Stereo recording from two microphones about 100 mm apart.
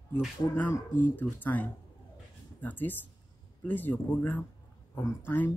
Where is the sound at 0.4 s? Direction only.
45° left (ahead or behind).